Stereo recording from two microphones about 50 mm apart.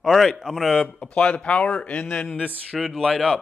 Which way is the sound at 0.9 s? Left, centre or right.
Left.